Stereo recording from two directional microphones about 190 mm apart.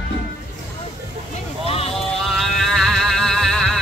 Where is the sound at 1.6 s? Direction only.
30° left (ahead or behind).